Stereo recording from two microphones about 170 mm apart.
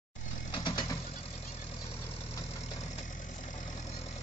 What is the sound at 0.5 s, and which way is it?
Vehicle, 30° left (ahead or behind).